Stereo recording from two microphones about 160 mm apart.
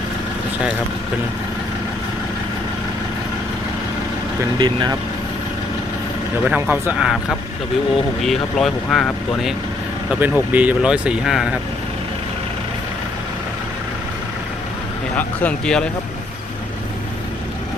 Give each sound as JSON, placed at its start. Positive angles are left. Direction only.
{"t": 4.4, "sound": "speech", "side_deg": -25}
{"t": 6.4, "sound": "speech", "side_deg": -10}
{"t": 7.0, "sound": "speech", "side_deg": 0}
{"t": 10.1, "sound": "speech", "side_deg": -10}
{"t": 15.1, "sound": "speech", "side_deg": 10}